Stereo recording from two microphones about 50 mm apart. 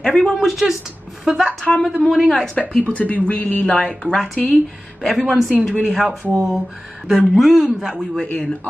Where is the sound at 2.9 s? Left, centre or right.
Left.